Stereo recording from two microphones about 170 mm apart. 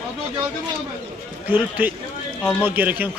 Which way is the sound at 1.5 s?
10° right (ahead or behind).